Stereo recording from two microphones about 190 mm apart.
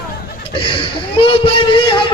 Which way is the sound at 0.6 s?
25° left (ahead or behind).